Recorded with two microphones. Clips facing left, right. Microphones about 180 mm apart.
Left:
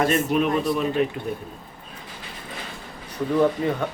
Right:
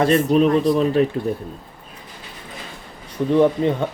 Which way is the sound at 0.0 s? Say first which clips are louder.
Right 5 dB; 30° right (ahead or behind).